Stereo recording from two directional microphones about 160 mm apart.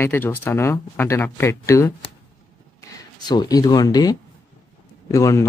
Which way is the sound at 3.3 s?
25° left (ahead or behind).